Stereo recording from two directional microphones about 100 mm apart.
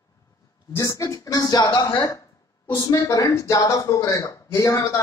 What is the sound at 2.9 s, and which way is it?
Speech, 35° left (ahead or behind).